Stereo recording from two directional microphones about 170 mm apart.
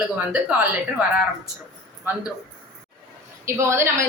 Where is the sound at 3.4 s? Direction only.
15° right (ahead or behind).